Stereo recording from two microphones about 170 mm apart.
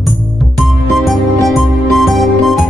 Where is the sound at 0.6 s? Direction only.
Centre (ahead or behind).